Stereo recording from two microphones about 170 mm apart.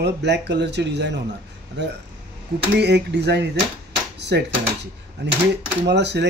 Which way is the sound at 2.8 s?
90° right.